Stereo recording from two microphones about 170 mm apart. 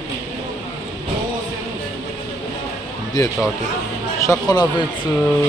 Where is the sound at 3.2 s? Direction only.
25° left (ahead or behind).